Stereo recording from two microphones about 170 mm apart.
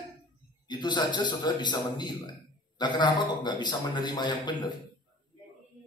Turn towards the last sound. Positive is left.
turn(degrees=25)  # may be behind; listen again after turning